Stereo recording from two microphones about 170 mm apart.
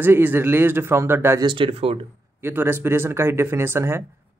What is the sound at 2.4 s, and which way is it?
A man's voice, 10° right (ahead or behind).